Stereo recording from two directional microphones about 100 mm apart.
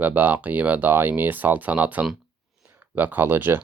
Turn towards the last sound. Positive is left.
turn(degrees=-20)  # may be behind; listen again after turning